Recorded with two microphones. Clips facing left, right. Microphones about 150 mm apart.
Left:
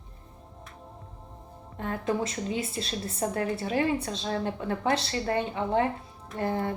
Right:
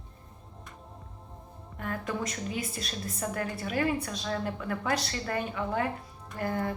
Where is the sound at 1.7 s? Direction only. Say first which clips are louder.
Left 5 dB; 25° left (ahead or behind).